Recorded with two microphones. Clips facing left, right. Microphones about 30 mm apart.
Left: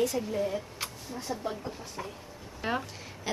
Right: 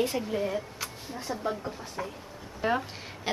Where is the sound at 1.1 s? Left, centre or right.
Centre.